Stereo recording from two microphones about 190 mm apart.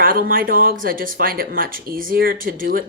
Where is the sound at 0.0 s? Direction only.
50° right (ahead or behind).